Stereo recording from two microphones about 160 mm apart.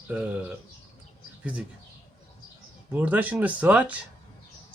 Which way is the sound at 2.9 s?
10° right (ahead or behind).